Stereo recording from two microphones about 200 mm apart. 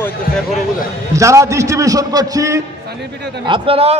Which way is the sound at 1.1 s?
15° right (ahead or behind).